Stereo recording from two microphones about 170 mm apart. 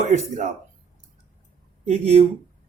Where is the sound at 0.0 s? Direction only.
45° right (ahead or behind).